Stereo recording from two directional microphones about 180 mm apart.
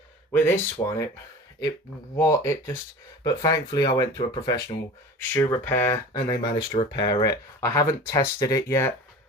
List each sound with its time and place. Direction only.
0.3 s speech: 15° left (ahead or behind)
2.1 s speech: 15° left (ahead or behind)